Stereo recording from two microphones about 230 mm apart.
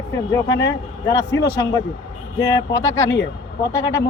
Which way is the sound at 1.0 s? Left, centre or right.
Centre.